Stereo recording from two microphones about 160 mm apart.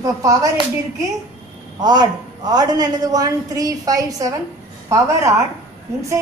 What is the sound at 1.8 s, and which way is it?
A woman's voice, 25° right (ahead or behind).